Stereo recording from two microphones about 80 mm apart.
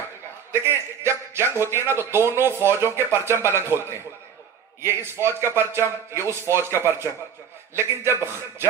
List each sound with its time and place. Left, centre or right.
0.5 s speech: right